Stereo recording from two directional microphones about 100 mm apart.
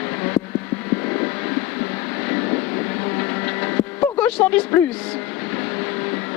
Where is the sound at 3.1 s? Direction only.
20° left (ahead or behind).